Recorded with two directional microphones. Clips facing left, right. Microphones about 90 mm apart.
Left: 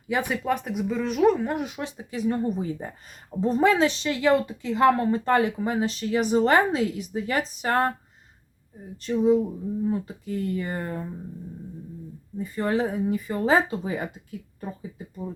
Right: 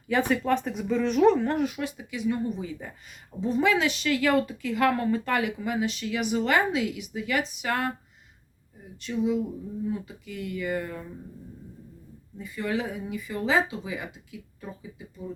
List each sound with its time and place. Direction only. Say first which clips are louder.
0.1 s speech: right 1 dB; 10° left (ahead or behind)
1.5 s speech: right 2 dB; 20° left (ahead or behind); by 7.9 s 35° left (ahead or behind)
9.0 s speech: left 6 dB; 40° left (ahead or behind)
12.4 s speech: left 5 dB; 40° left (ahead or behind)